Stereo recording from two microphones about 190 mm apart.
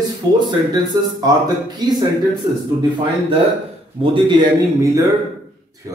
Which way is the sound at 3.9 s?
25° right (ahead or behind).